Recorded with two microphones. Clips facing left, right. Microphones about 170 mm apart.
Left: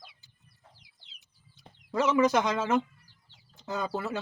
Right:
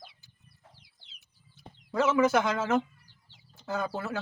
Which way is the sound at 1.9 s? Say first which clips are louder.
Even; 15° left (ahead or behind).